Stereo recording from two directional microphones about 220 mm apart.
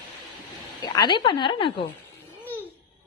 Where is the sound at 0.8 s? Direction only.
20° left (ahead or behind).